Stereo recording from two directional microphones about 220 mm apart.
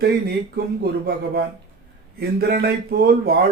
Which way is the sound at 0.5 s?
45° right (ahead or behind).